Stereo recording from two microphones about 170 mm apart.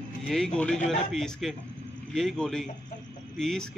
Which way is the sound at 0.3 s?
5° left (ahead or behind).